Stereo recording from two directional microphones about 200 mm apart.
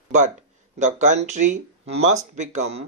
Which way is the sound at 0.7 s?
40° right (ahead or behind).